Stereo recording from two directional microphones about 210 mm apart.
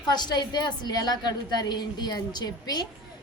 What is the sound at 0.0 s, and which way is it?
A woman's voice, 20° left (ahead or behind).